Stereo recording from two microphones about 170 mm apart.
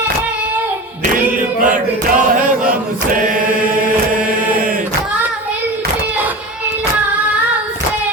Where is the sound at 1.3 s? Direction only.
50° right (ahead or behind).